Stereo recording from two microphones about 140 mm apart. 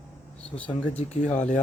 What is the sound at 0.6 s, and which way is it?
Speech, 50° left (ahead or behind).